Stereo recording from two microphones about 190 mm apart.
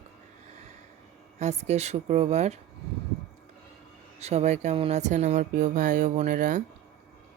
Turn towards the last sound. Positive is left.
turn(degrees=-45)  # may be behind; listen again after turning